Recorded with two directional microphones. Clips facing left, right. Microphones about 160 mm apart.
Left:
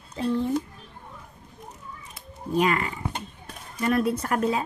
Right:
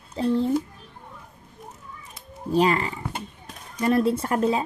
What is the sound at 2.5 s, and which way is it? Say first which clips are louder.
Speech: right 3 dB; 30° right (ahead or behind).